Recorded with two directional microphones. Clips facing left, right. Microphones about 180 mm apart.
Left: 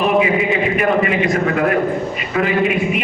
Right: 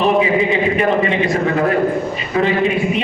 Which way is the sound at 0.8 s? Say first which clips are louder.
Even; 30° right (ahead or behind).